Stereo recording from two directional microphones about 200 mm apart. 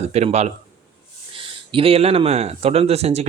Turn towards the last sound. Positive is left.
turn(degrees=-30)  # may be behind; listen again after turning